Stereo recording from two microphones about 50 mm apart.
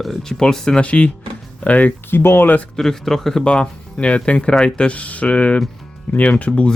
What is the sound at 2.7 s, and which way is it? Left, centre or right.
Speech, centre.